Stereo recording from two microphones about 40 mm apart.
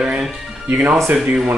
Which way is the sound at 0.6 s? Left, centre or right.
Right.